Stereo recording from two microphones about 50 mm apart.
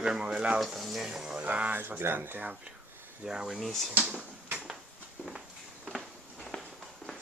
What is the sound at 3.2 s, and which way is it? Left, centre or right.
Speech, centre.